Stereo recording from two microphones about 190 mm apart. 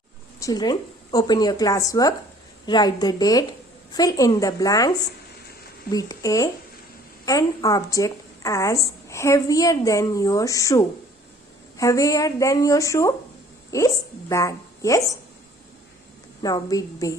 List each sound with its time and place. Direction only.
0.3 s speech: 20° left (ahead or behind)
5.9 s a woman's voice: 20° left (ahead or behind)
16.4 s speech: 20° left (ahead or behind)